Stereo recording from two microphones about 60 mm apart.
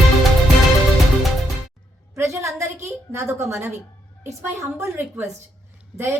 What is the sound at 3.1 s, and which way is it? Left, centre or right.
A woman's voice, right.